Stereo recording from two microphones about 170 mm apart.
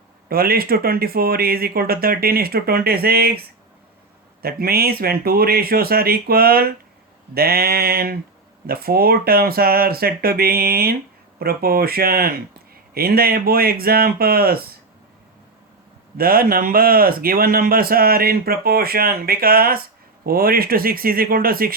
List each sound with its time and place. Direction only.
0.3 s speech: 65° right (ahead or behind)
4.4 s speech: 65° right (ahead or behind)
16.1 s speech: 60° right (ahead or behind)